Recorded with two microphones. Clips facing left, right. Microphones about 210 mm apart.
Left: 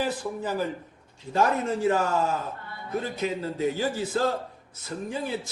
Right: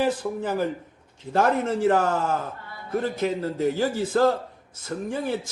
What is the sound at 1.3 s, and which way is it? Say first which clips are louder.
A man's voice: right 2 dB; 55° right (ahead or behind).